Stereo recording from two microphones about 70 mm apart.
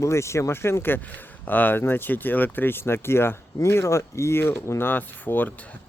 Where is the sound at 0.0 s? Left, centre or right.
Left.